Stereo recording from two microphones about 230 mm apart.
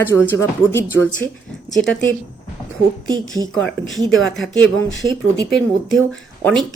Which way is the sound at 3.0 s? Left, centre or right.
Centre.